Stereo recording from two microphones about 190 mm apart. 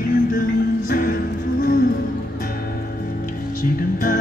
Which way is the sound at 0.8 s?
45° left (ahead or behind).